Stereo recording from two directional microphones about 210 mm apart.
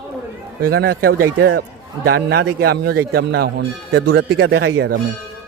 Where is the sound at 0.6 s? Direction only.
50° right (ahead or behind).